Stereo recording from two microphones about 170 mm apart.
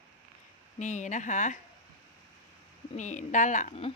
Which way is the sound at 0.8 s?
45° left (ahead or behind).